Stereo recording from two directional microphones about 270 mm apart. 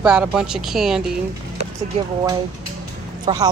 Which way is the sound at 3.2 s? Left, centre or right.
Centre.